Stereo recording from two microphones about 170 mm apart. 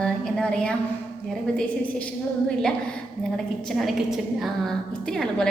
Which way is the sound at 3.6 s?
Centre (ahead or behind).